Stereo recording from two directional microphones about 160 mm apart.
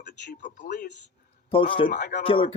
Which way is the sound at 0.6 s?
90° left.